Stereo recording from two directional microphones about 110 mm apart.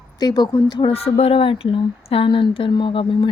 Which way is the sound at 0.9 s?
60° left (ahead or behind).